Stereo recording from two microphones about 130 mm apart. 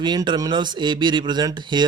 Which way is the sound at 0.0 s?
35° right (ahead or behind).